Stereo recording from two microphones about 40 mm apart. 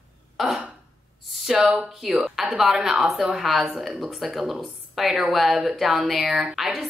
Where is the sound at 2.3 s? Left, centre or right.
Centre.